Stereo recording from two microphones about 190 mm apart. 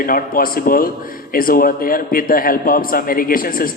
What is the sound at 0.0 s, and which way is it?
A man's voice, 50° left (ahead or behind).